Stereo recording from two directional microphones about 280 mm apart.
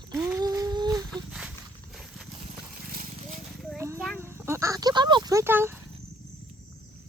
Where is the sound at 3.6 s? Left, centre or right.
Centre.